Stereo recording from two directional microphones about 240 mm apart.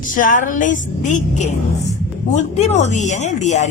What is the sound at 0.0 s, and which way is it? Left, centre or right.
Speech, left.